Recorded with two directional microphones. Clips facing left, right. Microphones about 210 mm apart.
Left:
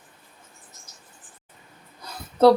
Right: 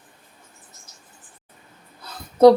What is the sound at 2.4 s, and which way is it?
Speech, 10° right (ahead or behind).